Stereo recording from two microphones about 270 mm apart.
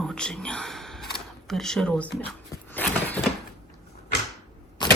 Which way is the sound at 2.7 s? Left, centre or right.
Centre.